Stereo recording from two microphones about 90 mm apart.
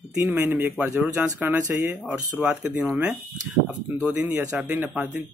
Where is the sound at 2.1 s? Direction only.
15° right (ahead or behind).